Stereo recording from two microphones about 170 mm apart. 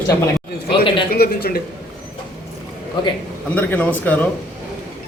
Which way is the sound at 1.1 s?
65° left (ahead or behind).